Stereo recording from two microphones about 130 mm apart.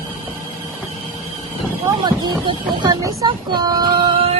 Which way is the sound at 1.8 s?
35° right (ahead or behind).